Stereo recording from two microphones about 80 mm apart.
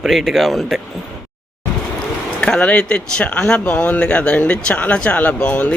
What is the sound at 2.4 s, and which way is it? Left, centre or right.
Speech, centre.